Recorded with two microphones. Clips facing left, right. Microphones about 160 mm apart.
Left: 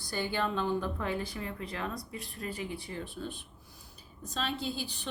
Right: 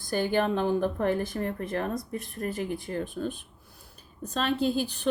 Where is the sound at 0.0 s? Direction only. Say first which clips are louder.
Right 7 dB; 50° right (ahead or behind).